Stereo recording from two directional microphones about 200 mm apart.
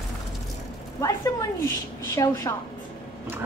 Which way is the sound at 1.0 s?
15° left (ahead or behind).